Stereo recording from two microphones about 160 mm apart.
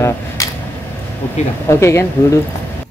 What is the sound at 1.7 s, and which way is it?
Speech, 15° left (ahead or behind).